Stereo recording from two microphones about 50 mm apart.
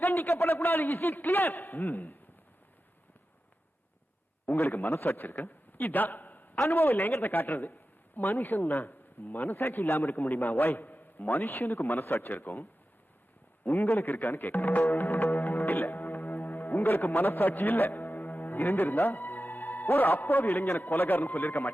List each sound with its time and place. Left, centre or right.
0.0 s a man's voice: left
4.4 s a man's voice: left
13.7 s a man's voice: left
14.8 s music: left
16.7 s speech: left